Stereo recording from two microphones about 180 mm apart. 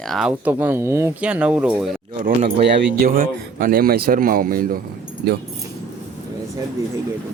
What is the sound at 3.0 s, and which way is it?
Speech, 50° right (ahead or behind).